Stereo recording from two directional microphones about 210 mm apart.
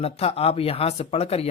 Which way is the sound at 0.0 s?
30° left (ahead or behind).